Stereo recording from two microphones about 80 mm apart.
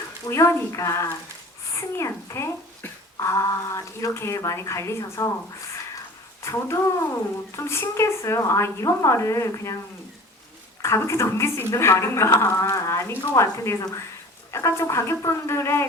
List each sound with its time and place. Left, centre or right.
0.3 s speech: left
6.4 s speech: left
10.8 s speech: left